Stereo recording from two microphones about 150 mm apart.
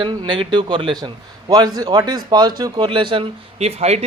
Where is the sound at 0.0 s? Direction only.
35° right (ahead or behind).